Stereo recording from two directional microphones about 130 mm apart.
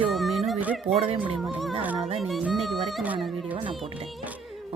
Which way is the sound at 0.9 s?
50° right (ahead or behind).